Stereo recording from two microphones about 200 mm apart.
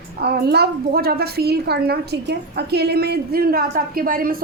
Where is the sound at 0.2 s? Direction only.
50° right (ahead or behind).